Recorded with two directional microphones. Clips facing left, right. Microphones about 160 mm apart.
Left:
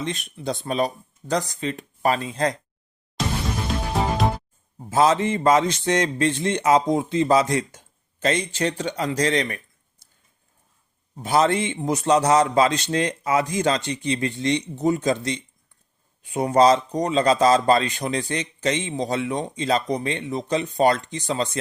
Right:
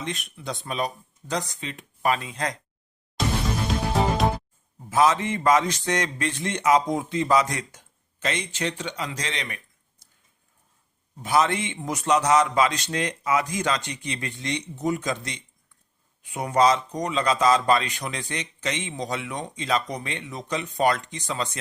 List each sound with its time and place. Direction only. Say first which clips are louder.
0.0 s speech: left 5 dB; 30° left (ahead or behind)
4.9 s a man's voice: left 2 dB; 30° left (ahead or behind)
11.2 s speech: left 3 dB; 30° left (ahead or behind)